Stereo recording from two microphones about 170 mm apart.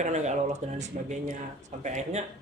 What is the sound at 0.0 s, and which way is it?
A man's voice, 40° right (ahead or behind).